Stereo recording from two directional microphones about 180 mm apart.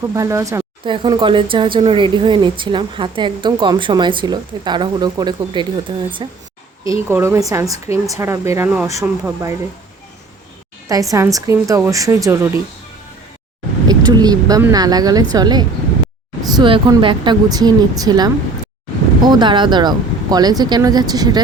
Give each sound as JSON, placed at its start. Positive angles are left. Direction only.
{"t": 0.1, "sound": "speech", "side_deg": -15}
{"t": 10.8, "sound": "speech", "side_deg": -20}
{"t": 13.8, "sound": "speech", "side_deg": -20}
{"t": 19.3, "sound": "speech", "side_deg": -25}